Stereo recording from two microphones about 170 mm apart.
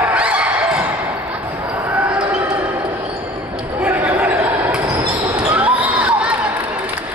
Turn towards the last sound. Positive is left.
turn(degrees=-10)  # may be behind; listen again after turning